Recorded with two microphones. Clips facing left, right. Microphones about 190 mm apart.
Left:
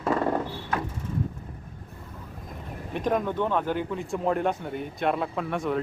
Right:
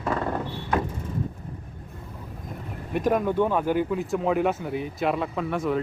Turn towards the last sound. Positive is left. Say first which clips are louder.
# right 2 dB
turn(degrees=0)  # may be behind; listen again after turning